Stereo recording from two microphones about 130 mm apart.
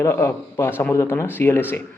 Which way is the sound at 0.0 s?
20° left (ahead or behind).